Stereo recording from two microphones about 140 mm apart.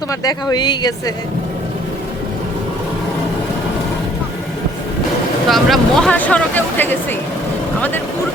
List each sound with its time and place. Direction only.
0.1 s speech: 30° left (ahead or behind)
5.5 s speech: centre (ahead or behind)